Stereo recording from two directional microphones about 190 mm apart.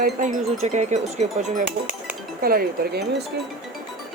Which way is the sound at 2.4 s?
55° right (ahead or behind).